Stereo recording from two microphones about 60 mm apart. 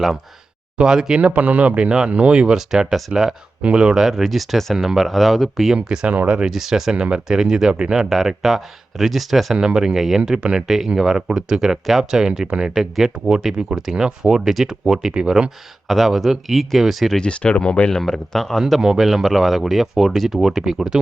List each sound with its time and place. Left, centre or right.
0.8 s speech: centre
1.2 s speech: right; by 3.3 s centre
3.6 s speech: centre
4.0 s speech: centre
5.7 s speech: centre
6.5 s speech: centre
6.9 s speech: centre
9.6 s speech: centre
15.9 s speech: centre
17.2 s speech: centre
18.6 s speech: centre